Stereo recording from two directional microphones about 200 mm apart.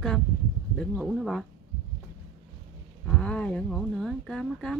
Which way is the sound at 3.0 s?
5° left (ahead or behind).